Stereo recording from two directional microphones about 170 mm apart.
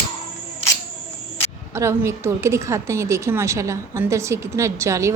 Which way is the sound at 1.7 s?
15° right (ahead or behind).